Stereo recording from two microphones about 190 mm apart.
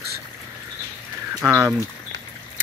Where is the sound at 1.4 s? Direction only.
10° right (ahead or behind).